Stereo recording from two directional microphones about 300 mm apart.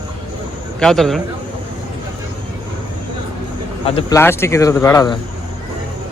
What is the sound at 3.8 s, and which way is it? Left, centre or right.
Speech, centre.